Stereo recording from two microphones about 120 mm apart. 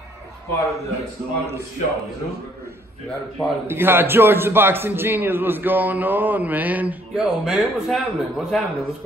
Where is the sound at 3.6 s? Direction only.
20° right (ahead or behind); by 8.6 s centre (ahead or behind).